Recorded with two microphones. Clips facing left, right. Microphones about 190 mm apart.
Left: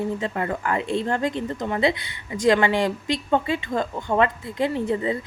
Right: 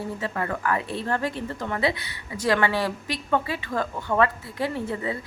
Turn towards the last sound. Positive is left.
turn(degrees=20)  # may be behind; listen again after turning